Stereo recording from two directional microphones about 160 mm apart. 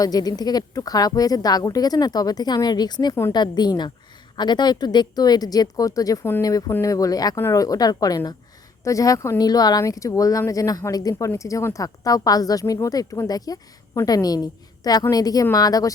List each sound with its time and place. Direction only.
0.0 s a woman's voice: 25° left (ahead or behind)